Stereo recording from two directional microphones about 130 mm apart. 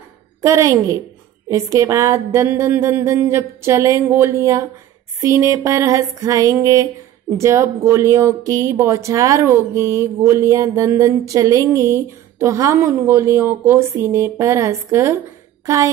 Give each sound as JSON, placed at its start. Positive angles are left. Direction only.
{"t": 0.4, "sound": "a woman's voice", "side_deg": -25}